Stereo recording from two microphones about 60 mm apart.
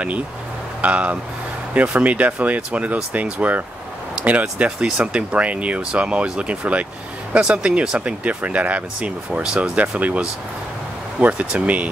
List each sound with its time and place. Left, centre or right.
0.7 s speech: right
4.7 s speech: centre